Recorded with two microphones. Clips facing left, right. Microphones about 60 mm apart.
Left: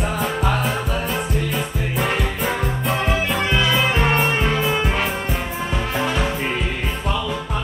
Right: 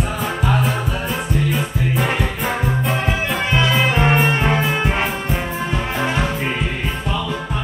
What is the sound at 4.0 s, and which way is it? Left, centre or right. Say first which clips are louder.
Music: right 2 dB; centre.